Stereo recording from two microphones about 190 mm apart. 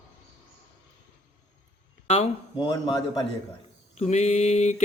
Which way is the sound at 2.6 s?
25° left (ahead or behind).